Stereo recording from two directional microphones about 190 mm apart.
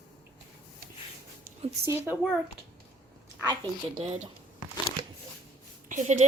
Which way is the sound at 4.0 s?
30° right (ahead or behind).